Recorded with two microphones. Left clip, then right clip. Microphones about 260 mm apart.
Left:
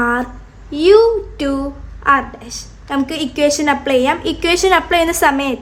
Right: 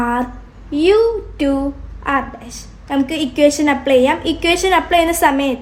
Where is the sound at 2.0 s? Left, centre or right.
Left.